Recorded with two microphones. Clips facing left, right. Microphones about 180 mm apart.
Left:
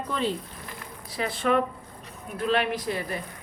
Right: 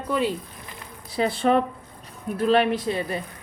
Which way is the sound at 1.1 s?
30° right (ahead or behind).